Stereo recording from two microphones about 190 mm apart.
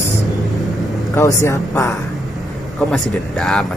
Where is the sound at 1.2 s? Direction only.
15° left (ahead or behind).